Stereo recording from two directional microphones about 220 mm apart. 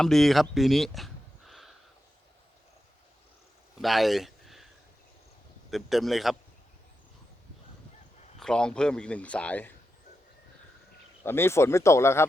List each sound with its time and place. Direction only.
0.0 s speech: centre (ahead or behind)
3.8 s a sound: centre (ahead or behind)
5.7 s speech: centre (ahead or behind)
8.4 s speech: 5° left (ahead or behind)
11.2 s speech: 10° left (ahead or behind)